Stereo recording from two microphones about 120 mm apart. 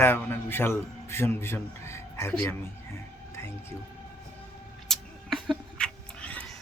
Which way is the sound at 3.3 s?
20° left (ahead or behind).